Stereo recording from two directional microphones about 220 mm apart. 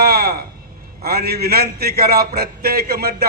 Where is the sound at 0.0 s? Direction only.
45° right (ahead or behind).